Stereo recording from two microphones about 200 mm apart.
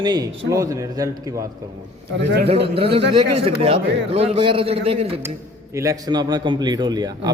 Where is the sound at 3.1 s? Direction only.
25° right (ahead or behind).